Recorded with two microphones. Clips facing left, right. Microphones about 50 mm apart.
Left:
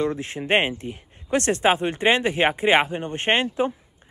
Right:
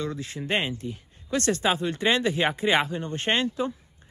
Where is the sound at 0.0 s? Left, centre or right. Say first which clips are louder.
Left 6 dB; left.